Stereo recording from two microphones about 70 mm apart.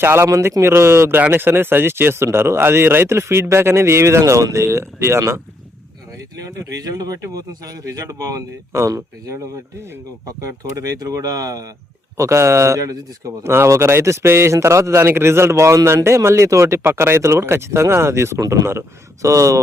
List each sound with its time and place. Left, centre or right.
0.0 s speech: right
0.3 s speech: right
6.4 s speech: right
12.1 s speech: right
13.4 s speech: right
18.3 s speech: right